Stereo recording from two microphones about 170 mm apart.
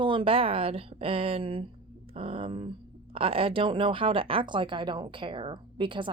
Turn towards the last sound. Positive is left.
turn(degrees=-30)  # may be behind; listen again after turning